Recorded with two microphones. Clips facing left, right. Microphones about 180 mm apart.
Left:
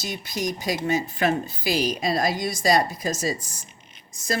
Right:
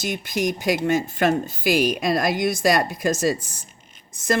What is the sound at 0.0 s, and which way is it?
Speech, 50° right (ahead or behind).